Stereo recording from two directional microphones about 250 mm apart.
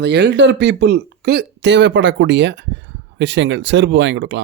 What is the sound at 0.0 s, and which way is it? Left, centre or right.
Speech, right.